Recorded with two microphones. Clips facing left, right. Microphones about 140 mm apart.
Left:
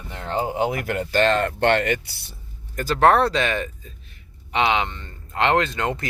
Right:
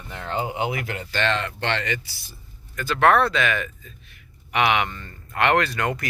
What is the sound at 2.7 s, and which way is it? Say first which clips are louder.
Speech: left 2 dB; 40° left (ahead or behind).